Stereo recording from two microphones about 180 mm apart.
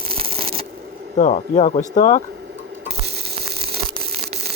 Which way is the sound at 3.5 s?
60° right (ahead or behind).